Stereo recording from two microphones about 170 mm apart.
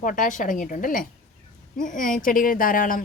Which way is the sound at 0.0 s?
50° left (ahead or behind).